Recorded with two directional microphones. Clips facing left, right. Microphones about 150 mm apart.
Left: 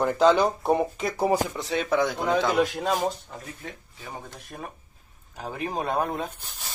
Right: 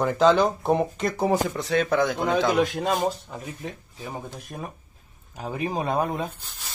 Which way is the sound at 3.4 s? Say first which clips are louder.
Right 4 dB; 20° right (ahead or behind).